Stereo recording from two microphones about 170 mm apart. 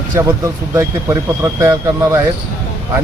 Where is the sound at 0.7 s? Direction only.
20° right (ahead or behind).